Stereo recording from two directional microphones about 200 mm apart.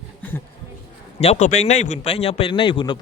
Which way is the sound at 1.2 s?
35° left (ahead or behind).